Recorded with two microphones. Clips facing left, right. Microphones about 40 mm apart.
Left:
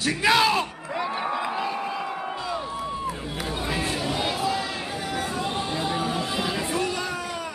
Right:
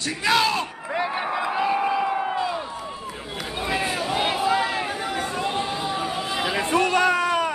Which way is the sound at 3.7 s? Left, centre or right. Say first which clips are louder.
Right 4 dB; centre.